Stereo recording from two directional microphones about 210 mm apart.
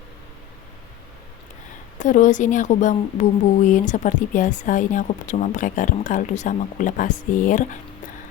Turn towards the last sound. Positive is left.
turn(degrees=40)  # may be behind; listen again after turning